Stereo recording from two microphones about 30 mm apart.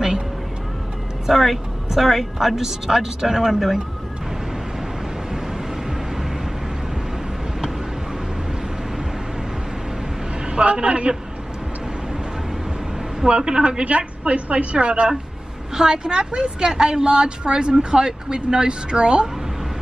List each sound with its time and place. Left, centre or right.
1.3 s speech: centre
10.6 s a man's voice: right
13.4 s a woman's voice: right
13.8 s a woman's voice: right
15.7 s a woman's voice: right